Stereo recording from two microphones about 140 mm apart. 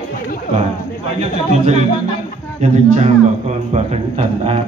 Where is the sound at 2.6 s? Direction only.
55° right (ahead or behind).